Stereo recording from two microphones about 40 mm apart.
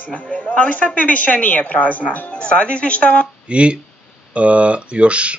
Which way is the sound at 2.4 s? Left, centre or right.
Left.